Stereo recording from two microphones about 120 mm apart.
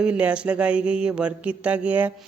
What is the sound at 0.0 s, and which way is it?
Speech, 10° right (ahead or behind).